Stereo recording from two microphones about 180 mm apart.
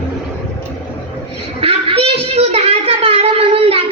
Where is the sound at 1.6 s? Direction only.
30° right (ahead or behind).